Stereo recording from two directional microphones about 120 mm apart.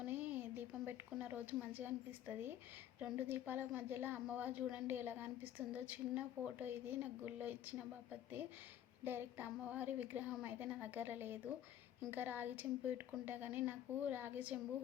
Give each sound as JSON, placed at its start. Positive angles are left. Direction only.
{"t": 0.0, "sound": "a sound", "side_deg": -15}
{"t": 3.0, "sound": "a woman's voice", "side_deg": -15}
{"t": 9.0, "sound": "a woman's voice", "side_deg": -15}